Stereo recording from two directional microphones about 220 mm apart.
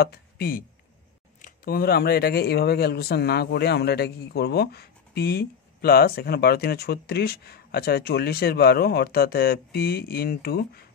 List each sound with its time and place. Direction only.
0.0 s speech: 45° left (ahead or behind)